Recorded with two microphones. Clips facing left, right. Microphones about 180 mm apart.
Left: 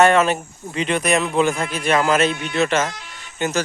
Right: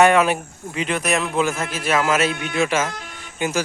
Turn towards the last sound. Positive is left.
turn(degrees=-10)  # may be behind; listen again after turning